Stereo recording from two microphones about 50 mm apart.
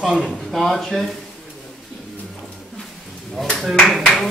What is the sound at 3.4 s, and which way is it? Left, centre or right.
Clapping, centre.